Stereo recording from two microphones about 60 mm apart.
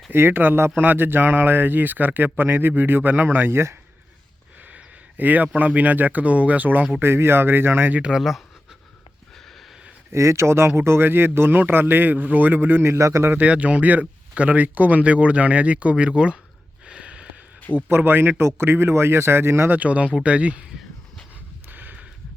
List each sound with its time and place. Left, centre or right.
0.1 s speech: right
4.7 s a sound: right
5.5 s speech: right
7.0 s speech: right
7.9 s speech: centre
10.1 s speech: right
13.0 s a man's voice: right
13.4 s speech: right
16.8 s a sound: centre
17.8 s speech: right
19.7 s speech: right
21.7 s a sound: right